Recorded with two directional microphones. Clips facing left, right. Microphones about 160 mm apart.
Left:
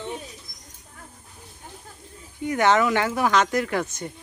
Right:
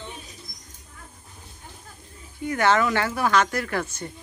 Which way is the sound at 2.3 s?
20° left (ahead or behind).